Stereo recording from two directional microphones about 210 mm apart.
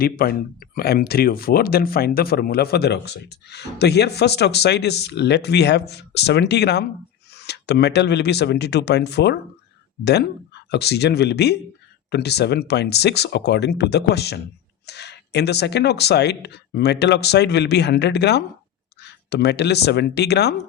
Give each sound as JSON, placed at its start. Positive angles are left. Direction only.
{"t": 0.0, "sound": "speech", "side_deg": 45}